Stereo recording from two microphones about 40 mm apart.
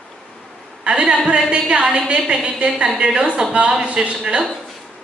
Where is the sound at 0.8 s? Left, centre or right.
Right.